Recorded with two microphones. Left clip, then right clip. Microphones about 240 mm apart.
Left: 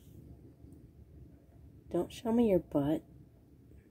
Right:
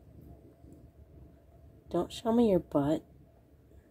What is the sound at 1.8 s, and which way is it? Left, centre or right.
Speech, centre.